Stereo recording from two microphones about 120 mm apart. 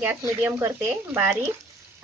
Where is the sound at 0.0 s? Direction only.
20° right (ahead or behind).